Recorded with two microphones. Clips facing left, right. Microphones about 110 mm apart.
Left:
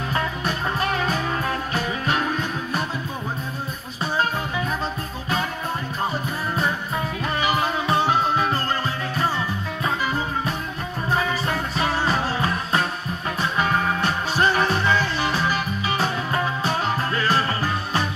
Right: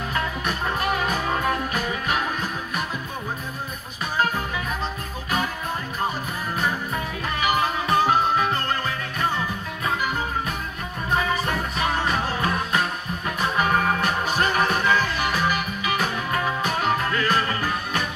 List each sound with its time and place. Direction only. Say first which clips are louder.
0.1 s music: left 2 dB; 30° left (ahead or behind)
7.3 s music: even; 30° left (ahead or behind)
11.1 s music: even; 30° left (ahead or behind)
14.0 s music: left 2 dB; 30° left (ahead or behind)